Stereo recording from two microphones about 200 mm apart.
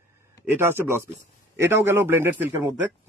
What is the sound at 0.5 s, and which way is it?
Speech, 10° right (ahead or behind).